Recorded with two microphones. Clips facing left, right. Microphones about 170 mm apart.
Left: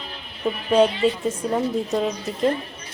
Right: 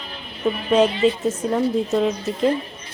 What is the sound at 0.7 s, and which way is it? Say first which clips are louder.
Speech: right 1 dB; centre (ahead or behind).